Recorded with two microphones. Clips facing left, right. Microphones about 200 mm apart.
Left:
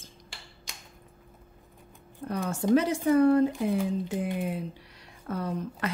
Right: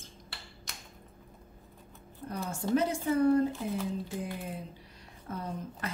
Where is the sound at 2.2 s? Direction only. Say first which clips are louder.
Left 6 dB; 75° left (ahead or behind).